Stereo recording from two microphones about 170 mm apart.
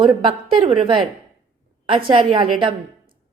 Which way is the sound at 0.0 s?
30° right (ahead or behind).